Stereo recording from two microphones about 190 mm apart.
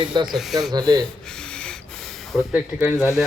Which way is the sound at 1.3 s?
5° left (ahead or behind).